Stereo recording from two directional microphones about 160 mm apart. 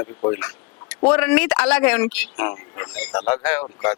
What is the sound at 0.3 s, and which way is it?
Speech, 15° left (ahead or behind).